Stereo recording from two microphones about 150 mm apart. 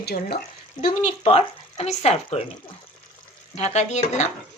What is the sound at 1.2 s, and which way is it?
Speech, 45° left (ahead or behind).